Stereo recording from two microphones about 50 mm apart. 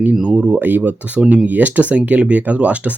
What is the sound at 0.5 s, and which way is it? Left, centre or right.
Speech, right.